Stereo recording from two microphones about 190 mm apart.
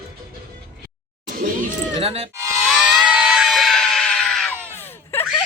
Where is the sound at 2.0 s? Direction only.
30° right (ahead or behind).